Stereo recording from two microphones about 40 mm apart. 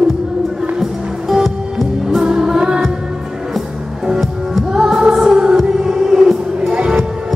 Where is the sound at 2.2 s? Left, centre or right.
Centre.